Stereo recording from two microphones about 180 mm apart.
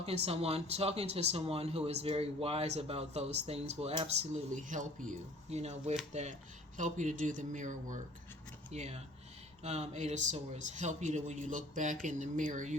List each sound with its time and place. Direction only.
0.0 s speech: 35° right (ahead or behind)